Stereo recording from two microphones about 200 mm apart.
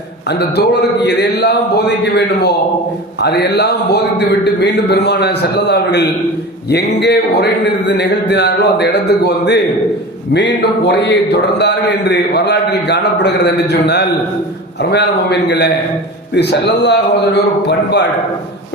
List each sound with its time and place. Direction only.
0.3 s a man's voice: 55° left (ahead or behind)